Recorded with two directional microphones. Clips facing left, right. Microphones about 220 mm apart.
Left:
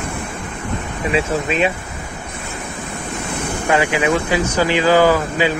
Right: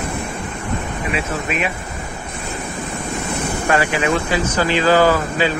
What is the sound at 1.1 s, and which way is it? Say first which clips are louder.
Speech: left 6 dB; 30° left (ahead or behind).